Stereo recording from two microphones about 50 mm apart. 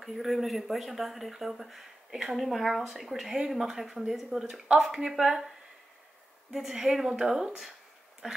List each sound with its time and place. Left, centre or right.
0.0 s a woman's voice: centre
6.5 s a woman's voice: centre